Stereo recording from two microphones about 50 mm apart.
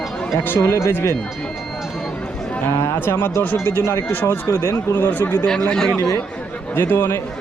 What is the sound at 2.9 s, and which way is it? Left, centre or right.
Speech, left.